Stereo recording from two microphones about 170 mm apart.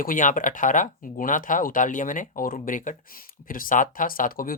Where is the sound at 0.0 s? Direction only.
50° left (ahead or behind).